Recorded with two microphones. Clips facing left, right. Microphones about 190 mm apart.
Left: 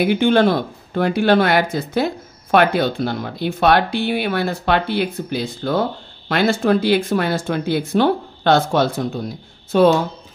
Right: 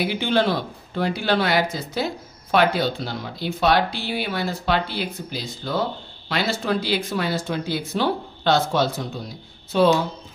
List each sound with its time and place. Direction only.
0.0 s speech: 55° left (ahead or behind)